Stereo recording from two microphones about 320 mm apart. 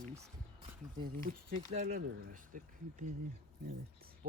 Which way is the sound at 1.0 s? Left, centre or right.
Right.